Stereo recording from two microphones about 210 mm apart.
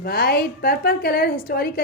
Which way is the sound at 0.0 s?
45° left (ahead or behind).